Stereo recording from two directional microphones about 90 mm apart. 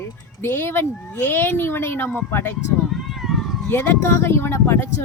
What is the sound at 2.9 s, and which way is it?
Cat, centre (ahead or behind).